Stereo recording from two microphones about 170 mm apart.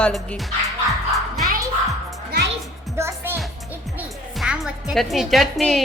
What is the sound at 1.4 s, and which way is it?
Music, 55° right (ahead or behind).